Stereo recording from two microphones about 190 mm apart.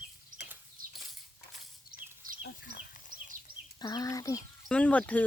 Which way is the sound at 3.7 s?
20° left (ahead or behind).